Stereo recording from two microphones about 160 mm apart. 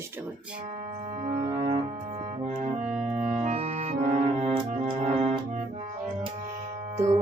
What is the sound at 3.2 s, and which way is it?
Music, 45° right (ahead or behind).